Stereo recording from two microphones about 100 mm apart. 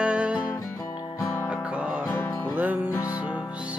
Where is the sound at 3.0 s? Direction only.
35° left (ahead or behind).